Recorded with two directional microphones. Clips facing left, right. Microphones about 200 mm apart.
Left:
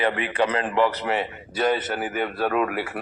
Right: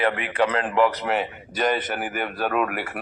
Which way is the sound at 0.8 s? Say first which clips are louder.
Right 2 dB; centre (ahead or behind).